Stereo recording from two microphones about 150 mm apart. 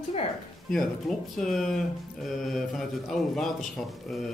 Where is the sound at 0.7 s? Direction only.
Centre (ahead or behind).